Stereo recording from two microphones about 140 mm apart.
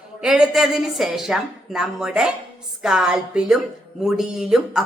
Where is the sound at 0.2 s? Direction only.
5° right (ahead or behind).